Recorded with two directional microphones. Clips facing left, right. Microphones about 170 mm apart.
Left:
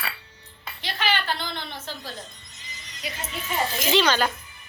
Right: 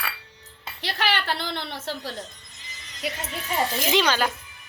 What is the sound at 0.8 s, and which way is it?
A woman's voice, 70° right (ahead or behind).